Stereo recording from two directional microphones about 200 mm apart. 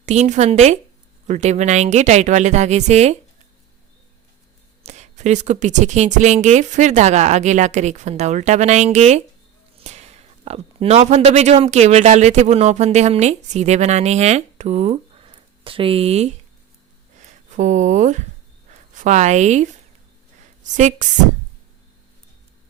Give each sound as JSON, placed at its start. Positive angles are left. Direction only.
{"t": 0.0, "sound": "speech", "side_deg": -35}
{"t": 4.8, "sound": "speech", "side_deg": -35}
{"t": 17.5, "sound": "speech", "side_deg": -35}
{"t": 20.7, "sound": "speech", "side_deg": -40}